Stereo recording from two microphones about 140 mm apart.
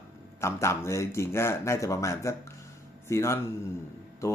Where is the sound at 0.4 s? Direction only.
20° left (ahead or behind).